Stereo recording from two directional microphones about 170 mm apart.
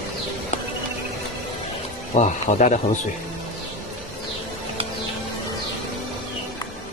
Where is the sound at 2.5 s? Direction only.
45° left (ahead or behind).